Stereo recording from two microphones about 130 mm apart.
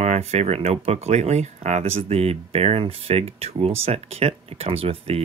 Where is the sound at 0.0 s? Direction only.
55° right (ahead or behind).